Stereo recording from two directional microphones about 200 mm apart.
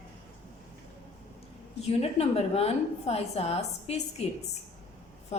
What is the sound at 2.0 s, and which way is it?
A woman's voice, 30° left (ahead or behind).